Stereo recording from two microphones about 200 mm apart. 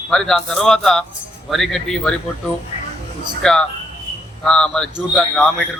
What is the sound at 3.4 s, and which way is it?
A man's voice, 5° left (ahead or behind).